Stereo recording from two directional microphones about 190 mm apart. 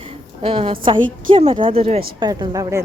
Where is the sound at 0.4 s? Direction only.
30° right (ahead or behind).